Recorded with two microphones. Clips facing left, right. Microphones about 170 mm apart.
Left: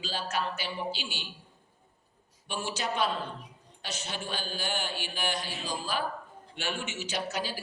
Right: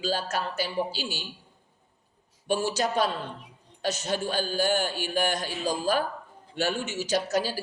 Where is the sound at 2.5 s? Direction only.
40° right (ahead or behind).